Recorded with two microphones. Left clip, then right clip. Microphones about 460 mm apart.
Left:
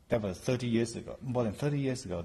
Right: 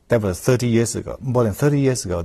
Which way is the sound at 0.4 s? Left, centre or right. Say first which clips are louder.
Right 13 dB; right.